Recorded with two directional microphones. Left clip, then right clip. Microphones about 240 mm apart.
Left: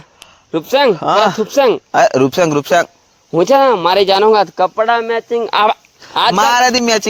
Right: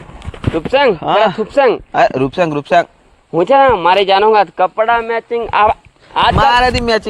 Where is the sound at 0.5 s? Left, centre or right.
Left.